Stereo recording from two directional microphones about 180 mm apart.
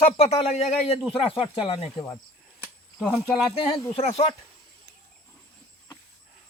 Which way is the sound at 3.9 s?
35° left (ahead or behind).